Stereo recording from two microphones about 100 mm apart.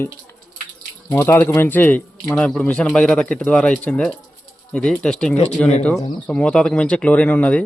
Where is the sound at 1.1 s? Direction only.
20° left (ahead or behind).